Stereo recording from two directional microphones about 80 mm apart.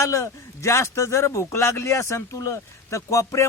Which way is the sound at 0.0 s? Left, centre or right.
Left.